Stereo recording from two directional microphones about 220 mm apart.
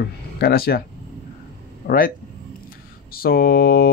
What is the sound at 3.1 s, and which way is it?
Speech, 45° left (ahead or behind).